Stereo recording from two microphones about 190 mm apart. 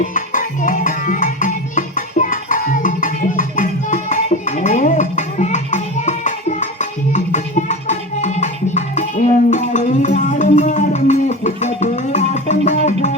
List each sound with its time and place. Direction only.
0.0 s music: 45° left (ahead or behind)